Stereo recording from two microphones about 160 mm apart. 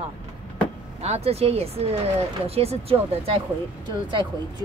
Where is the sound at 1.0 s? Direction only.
40° right (ahead or behind).